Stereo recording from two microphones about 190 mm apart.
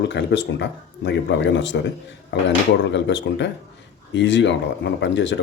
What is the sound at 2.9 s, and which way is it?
Speech, 70° left (ahead or behind).